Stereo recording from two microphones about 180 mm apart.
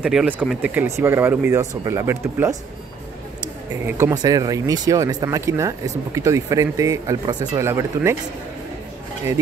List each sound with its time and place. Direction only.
0.0 s speech: 5° right (ahead or behind)
3.8 s speech: 20° right (ahead or behind)